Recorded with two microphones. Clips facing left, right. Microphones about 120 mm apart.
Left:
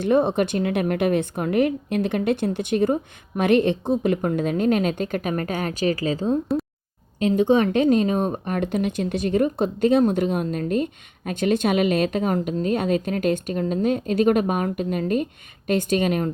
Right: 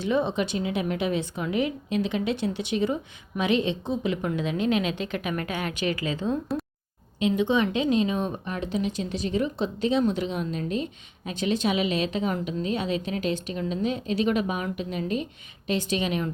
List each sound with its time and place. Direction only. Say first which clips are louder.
0.0 s a woman's voice: left 6 dB; 55° left (ahead or behind)